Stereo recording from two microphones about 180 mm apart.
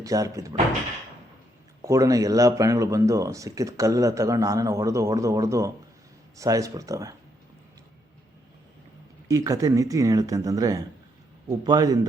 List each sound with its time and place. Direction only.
0.0 s speech: 20° right (ahead or behind)
1.8 s speech: 20° right (ahead or behind)
9.2 s speech: 20° right (ahead or behind)